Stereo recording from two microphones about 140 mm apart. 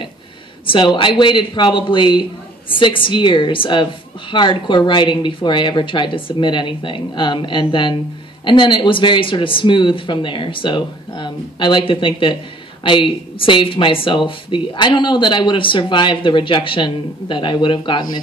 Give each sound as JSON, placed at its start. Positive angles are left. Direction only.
{"t": 0.7, "sound": "a woman's voice", "side_deg": 35}